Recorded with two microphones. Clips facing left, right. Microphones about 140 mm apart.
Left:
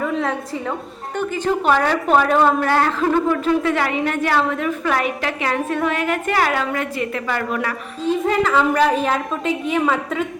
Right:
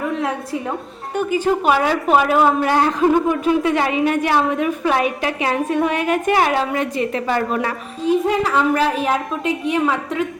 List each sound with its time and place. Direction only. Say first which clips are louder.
0.0 s a sound: even; 5° right (ahead or behind)
1.1 s a woman's voice: right 3 dB; 10° right (ahead or behind); by 7.7 s 30° right (ahead or behind)
8.0 s a woman's voice: right 1 dB; 10° right (ahead or behind)